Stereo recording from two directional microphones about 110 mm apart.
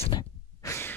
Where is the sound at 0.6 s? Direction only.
25° left (ahead or behind).